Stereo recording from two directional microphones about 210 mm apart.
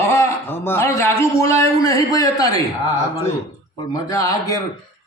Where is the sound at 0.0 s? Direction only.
10° left (ahead or behind).